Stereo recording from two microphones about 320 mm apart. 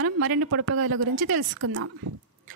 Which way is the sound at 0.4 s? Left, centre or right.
Right.